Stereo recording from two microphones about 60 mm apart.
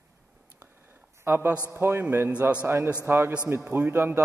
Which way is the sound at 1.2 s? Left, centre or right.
Right.